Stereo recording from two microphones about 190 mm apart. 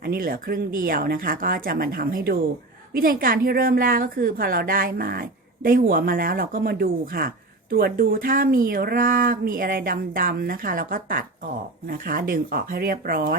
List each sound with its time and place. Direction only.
0.0 s speech: 50° right (ahead or behind)